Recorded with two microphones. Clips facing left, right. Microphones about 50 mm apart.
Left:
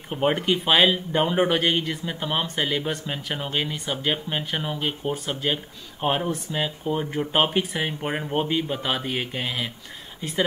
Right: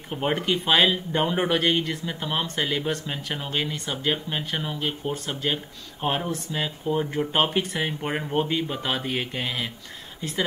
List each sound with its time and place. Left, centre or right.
0.1 s speech: centre